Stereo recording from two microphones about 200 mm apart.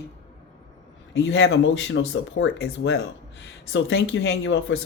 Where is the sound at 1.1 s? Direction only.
65° left (ahead or behind).